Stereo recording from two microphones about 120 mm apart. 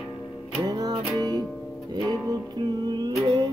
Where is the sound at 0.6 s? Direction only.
35° right (ahead or behind).